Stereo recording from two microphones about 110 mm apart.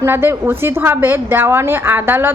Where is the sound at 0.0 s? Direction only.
20° right (ahead or behind).